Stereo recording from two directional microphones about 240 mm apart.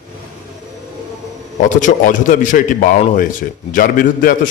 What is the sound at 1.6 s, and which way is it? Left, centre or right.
A man's voice, left.